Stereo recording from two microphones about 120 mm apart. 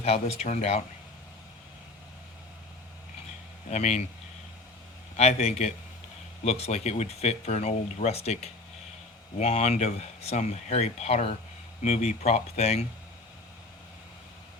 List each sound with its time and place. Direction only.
0.0 s speech: 60° left (ahead or behind)
3.7 s speech: 70° left (ahead or behind)
5.1 s speech: 65° left (ahead or behind)
11.8 s speech: 70° left (ahead or behind)